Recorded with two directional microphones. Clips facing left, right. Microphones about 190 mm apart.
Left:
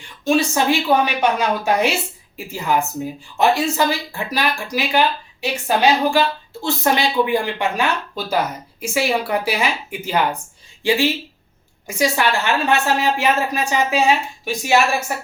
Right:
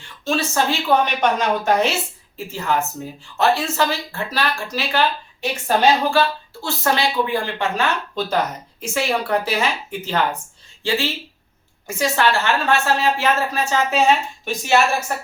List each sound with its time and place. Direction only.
0.0 s speech: 15° left (ahead or behind)